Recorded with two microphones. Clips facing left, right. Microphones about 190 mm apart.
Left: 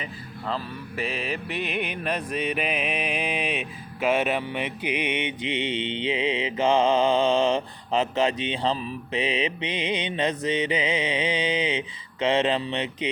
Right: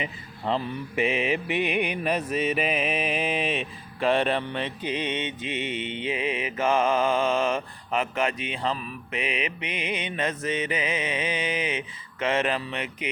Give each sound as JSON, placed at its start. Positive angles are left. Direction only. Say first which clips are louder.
{"t": 0.4, "sound": "mantra", "louder": "right 4 dB", "side_deg": -20}